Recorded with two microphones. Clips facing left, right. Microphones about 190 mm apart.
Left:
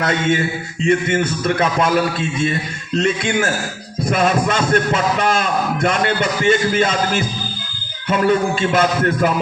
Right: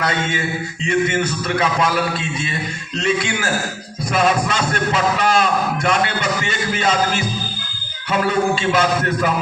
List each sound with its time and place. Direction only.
0.0 s a man's voice: 50° left (ahead or behind)
4.1 s a man's voice: 50° left (ahead or behind)